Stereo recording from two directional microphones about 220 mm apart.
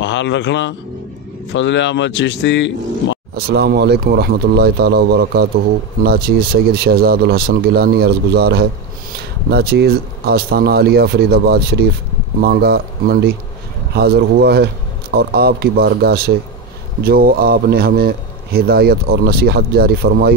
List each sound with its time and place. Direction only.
0.0 s a man's voice: 55° left (ahead or behind)
3.3 s a man's voice: 45° right (ahead or behind)